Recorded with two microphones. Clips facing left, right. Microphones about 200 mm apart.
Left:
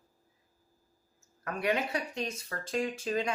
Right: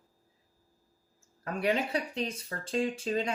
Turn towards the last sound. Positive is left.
turn(degrees=-30)  # may be behind; listen again after turning